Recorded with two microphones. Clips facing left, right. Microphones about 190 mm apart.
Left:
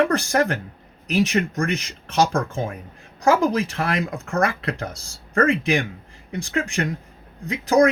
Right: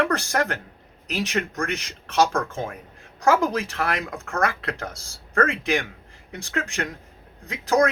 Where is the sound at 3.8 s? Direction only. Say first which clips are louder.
Left 3 dB; 25° left (ahead or behind).